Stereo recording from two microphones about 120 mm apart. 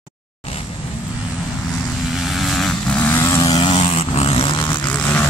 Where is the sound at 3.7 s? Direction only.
55° left (ahead or behind).